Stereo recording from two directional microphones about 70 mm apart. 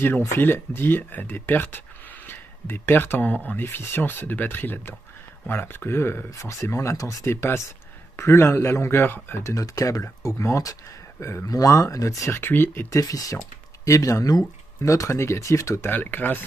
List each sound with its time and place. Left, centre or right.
0.0 s speech: left
7.2 s speech: left
9.4 s speech: left
11.4 s speech: left
12.4 s speech: left
12.9 s speech: left
15.9 s speech: left